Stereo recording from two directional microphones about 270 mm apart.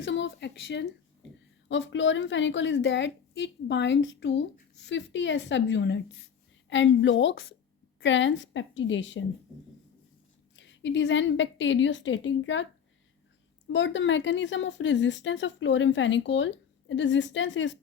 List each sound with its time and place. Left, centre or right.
0.0 s a woman's voice: left
10.5 s a woman's voice: left
13.7 s a woman's voice: left